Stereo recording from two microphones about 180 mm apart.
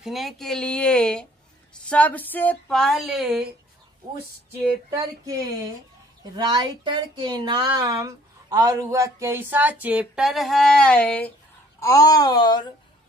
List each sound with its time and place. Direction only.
0.0 s speech: centre (ahead or behind)
4.9 s speech: 20° right (ahead or behind); by 12.7 s 25° left (ahead or behind)